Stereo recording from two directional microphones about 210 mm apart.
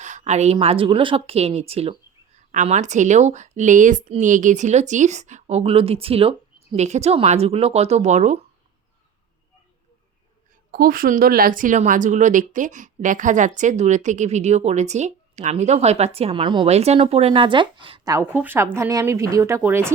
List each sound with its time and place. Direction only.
0.0 s a woman's voice: 35° right (ahead or behind)
10.7 s a woman's voice: 45° right (ahead or behind); by 19.9 s 10° right (ahead or behind)